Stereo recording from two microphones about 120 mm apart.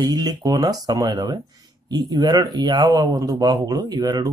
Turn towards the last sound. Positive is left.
turn(degrees=-35)  # may be behind; listen again after turning